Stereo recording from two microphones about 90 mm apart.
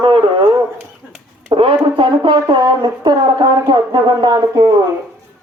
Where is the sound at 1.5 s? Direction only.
75° right (ahead or behind).